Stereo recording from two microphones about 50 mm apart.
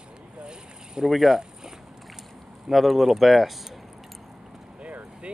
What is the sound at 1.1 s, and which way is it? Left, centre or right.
Speech, centre.